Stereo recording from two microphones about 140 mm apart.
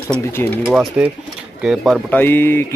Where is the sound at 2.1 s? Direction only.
15° left (ahead or behind).